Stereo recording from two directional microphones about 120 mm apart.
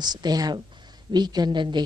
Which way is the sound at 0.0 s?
35° right (ahead or behind).